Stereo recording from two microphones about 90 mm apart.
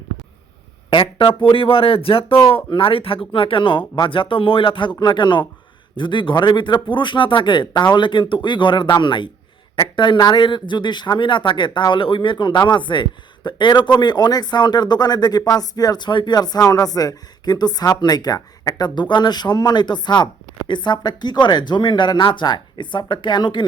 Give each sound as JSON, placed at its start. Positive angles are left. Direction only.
{"t": 0.9, "sound": "a man's voice", "side_deg": 60}
{"t": 3.3, "sound": "speech", "side_deg": 70}
{"t": 4.9, "sound": "speech", "side_deg": 55}